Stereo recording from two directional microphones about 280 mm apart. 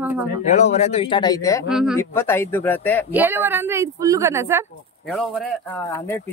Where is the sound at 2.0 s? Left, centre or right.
Centre.